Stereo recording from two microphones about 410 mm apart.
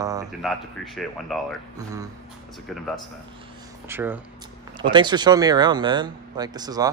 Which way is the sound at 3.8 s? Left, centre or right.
Centre.